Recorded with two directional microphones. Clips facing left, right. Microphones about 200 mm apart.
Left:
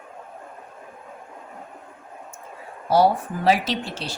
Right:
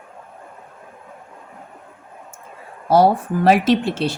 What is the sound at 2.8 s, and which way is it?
Speech, 50° right (ahead or behind).